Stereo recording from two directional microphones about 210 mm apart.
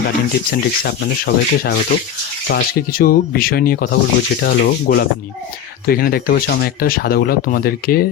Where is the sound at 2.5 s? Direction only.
45° left (ahead or behind).